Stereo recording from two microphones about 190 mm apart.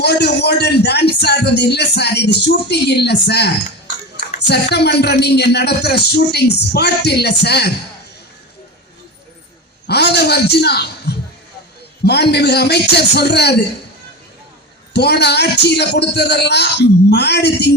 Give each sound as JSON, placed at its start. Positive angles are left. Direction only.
{"t": 0.0, "sound": "speech", "side_deg": 60}
{"t": 9.8, "sound": "a man's voice", "side_deg": 60}
{"t": 14.9, "sound": "speech", "side_deg": 60}